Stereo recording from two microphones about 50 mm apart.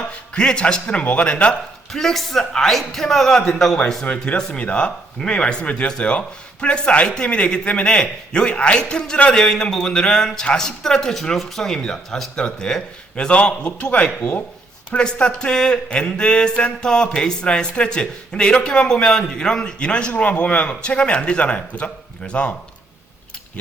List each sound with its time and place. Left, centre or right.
0.3 s speech: centre
1.9 s speech: centre
4.0 s speech: left
14.2 s speech: left
14.9 s speech: centre